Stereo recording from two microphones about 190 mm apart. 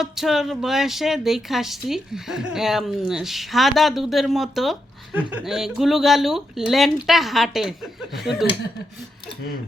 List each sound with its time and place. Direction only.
0.0 s speech: centre (ahead or behind)